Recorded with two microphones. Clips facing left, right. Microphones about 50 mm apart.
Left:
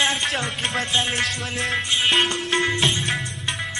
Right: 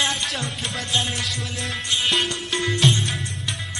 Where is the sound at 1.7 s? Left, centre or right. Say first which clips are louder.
Left 2 dB; left.